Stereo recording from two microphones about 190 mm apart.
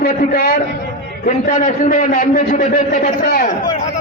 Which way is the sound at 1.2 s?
45° left (ahead or behind).